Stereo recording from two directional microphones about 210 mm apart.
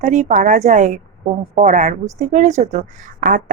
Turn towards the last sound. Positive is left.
turn(degrees=-40)  # may be behind; listen again after turning